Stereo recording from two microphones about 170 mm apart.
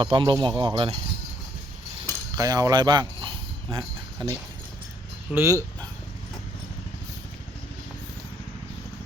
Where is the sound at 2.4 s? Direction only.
20° right (ahead or behind).